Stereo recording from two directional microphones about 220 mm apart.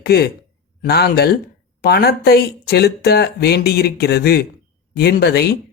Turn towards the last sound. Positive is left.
turn(degrees=50)  # may be behind; listen again after turning